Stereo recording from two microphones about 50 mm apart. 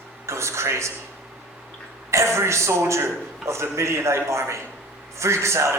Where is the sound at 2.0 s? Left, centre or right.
Right.